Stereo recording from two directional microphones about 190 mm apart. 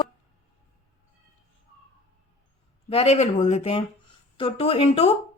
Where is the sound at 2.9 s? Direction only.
35° left (ahead or behind).